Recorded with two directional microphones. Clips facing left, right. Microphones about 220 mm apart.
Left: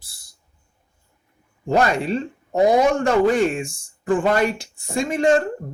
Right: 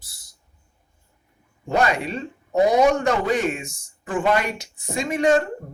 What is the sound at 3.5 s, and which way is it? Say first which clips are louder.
Speech: left 3 dB; 30° left (ahead or behind).